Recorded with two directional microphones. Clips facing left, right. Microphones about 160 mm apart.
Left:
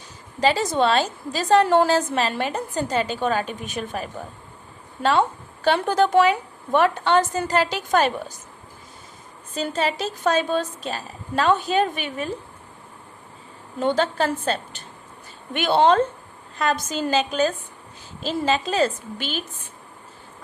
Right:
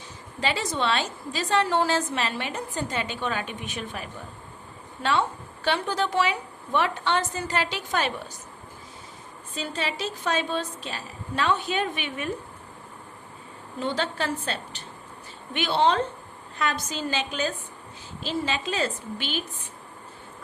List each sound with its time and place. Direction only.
0.3 s a woman's voice: 40° left (ahead or behind)
5.6 s a woman's voice: 45° left (ahead or behind)
9.6 s a woman's voice: 45° left (ahead or behind)
13.7 s a woman's voice: 45° left (ahead or behind)